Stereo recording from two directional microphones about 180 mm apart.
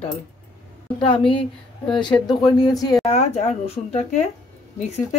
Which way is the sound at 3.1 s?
40° left (ahead or behind).